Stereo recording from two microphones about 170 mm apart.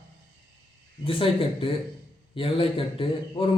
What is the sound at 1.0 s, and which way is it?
Speech, 30° left (ahead or behind).